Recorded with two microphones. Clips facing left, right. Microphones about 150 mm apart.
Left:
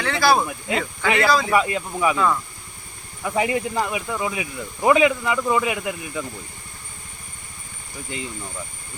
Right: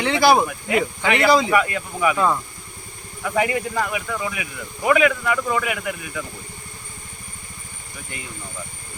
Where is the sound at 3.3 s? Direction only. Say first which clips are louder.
Even; 25° left (ahead or behind).